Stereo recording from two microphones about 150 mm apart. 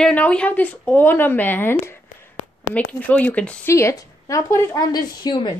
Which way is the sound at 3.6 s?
20° left (ahead or behind).